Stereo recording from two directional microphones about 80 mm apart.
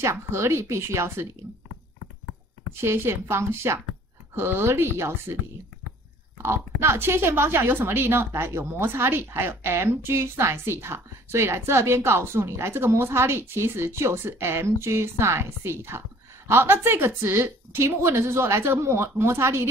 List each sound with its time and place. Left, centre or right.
0.0 s a woman's voice: right
2.7 s a woman's voice: right
6.8 s a woman's voice: right